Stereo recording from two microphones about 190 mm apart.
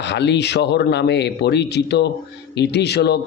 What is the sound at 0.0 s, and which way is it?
Speech, 65° left (ahead or behind).